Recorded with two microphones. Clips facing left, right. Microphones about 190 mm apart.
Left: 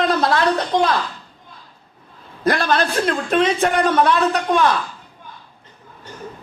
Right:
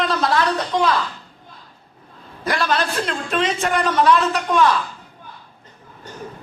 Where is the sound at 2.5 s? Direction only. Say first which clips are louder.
Left 3 dB; 50° left (ahead or behind).